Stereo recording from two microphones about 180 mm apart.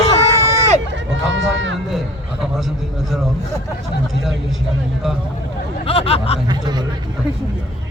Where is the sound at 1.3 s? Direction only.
90° right.